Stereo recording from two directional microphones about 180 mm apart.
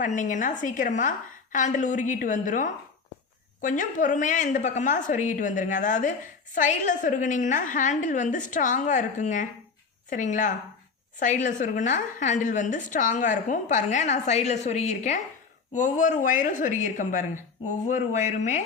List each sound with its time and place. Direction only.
0.0 s a woman's voice: 45° left (ahead or behind)